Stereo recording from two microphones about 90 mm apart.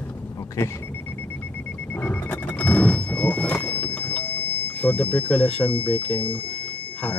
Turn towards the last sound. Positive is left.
turn(degrees=15)  # may be behind; listen again after turning